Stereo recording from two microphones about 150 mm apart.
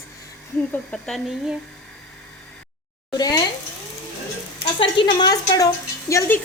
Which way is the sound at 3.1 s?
25° left (ahead or behind).